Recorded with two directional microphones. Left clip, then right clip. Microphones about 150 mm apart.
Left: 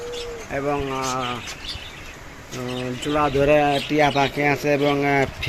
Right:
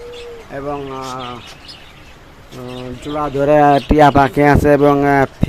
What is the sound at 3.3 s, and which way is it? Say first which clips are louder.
Speech: right 7 dB; 30° right (ahead or behind).